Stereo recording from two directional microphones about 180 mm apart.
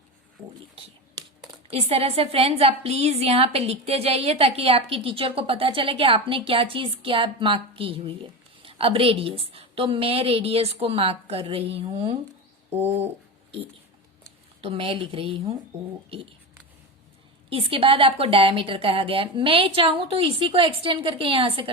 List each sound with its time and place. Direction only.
1.6 s a woman's voice: 30° right (ahead or behind)
12.7 s bird: 10° right (ahead or behind)
14.6 s a woman's voice: 30° right (ahead or behind)
17.5 s a woman's voice: 30° right (ahead or behind)